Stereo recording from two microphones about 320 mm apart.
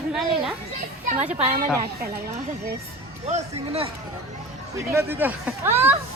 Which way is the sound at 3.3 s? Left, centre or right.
Centre.